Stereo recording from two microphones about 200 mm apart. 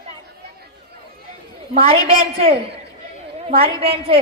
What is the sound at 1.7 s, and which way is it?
A woman's voice, 30° right (ahead or behind).